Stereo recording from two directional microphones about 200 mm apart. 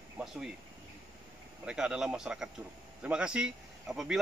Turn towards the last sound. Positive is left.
turn(degrees=0)  # may be behind; listen again after turning